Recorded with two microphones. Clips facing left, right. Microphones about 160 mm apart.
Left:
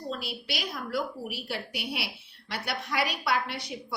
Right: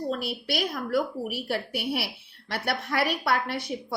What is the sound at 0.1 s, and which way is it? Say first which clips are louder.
A woman's voice: right 6 dB; 55° right (ahead or behind).